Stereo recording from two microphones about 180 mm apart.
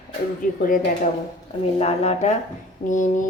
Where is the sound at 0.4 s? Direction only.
50° left (ahead or behind).